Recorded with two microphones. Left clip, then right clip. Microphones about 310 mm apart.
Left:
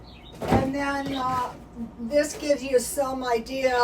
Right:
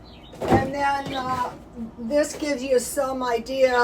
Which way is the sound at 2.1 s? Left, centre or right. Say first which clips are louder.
Even; right.